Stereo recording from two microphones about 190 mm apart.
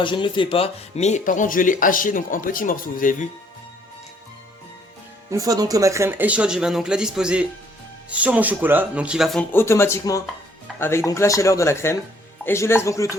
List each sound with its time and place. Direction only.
0.0 s speech: 25° left (ahead or behind); by 3.2 s 45° left (ahead or behind)
5.3 s speech: 20° right (ahead or behind); by 13.1 s 15° left (ahead or behind)